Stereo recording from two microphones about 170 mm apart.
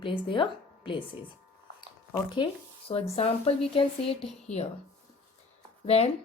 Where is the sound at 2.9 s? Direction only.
35° left (ahead or behind).